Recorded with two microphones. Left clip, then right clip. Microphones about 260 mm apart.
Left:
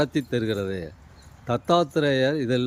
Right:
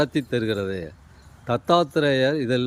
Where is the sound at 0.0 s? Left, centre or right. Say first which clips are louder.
Right 2 dB; centre.